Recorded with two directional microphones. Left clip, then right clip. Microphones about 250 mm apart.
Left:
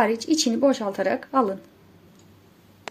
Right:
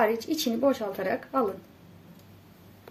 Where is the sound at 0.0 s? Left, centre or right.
Left.